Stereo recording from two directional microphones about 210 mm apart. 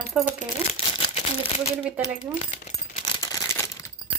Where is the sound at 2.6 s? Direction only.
25° left (ahead or behind).